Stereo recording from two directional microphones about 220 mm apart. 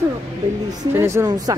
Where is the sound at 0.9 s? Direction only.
10° right (ahead or behind).